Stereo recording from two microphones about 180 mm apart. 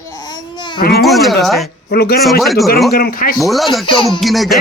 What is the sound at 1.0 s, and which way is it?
Speech, centre (ahead or behind).